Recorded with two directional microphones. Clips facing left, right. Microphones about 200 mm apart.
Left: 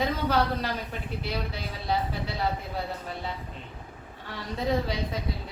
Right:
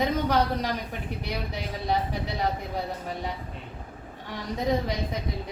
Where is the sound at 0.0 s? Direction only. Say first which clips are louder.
Right 2 dB; 15° right (ahead or behind).